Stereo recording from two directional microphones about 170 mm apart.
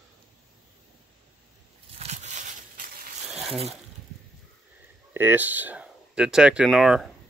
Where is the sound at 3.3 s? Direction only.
Centre (ahead or behind).